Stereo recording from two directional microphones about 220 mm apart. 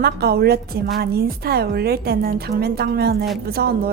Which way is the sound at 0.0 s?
45° right (ahead or behind).